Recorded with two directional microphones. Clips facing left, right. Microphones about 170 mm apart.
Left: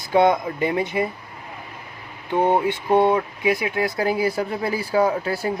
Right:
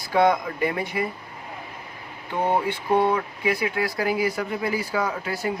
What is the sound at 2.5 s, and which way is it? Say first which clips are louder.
Speech: left 1 dB; 20° left (ahead or behind).